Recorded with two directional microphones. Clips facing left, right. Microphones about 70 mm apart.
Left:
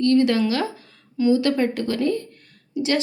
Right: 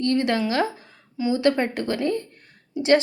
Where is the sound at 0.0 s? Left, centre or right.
Right.